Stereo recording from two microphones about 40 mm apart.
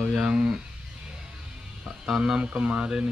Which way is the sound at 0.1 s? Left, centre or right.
Right.